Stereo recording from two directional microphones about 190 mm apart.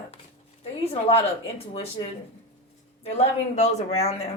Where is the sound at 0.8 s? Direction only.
30° left (ahead or behind).